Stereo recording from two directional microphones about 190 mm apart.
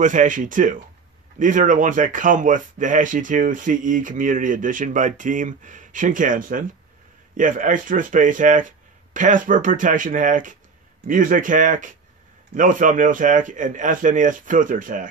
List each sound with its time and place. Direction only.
0.0 s speech: 40° right (ahead or behind)